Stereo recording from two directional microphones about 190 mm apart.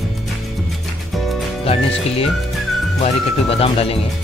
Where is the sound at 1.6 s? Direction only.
30° left (ahead or behind).